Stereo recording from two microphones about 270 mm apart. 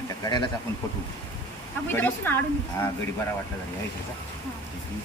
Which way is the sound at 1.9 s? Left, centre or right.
Centre.